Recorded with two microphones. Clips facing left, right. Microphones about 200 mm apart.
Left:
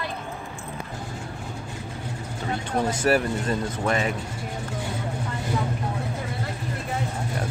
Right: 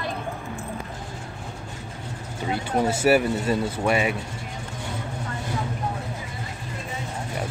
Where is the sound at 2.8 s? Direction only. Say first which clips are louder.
Right 3 dB; 5° right (ahead or behind).